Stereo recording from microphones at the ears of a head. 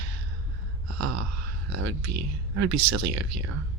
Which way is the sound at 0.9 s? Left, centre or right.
Right.